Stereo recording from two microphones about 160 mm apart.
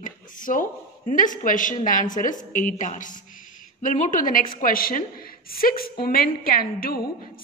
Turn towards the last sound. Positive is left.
turn(degrees=65)  # may be behind; listen again after turning